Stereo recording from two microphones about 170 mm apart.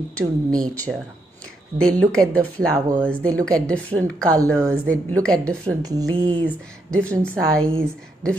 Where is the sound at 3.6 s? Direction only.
5° left (ahead or behind).